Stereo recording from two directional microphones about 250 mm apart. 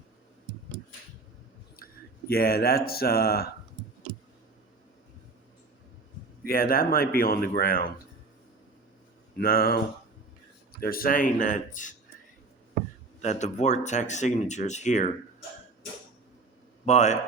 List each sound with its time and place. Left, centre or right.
1.7 s speech: left
6.4 s a man's voice: left
9.4 s a man's voice: left
13.2 s speech: left
16.8 s speech: left